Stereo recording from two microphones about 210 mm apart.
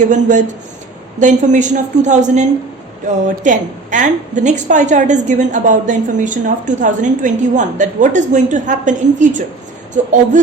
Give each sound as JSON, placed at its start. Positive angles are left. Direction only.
{"t": 0.1, "sound": "a woman's voice", "side_deg": -35}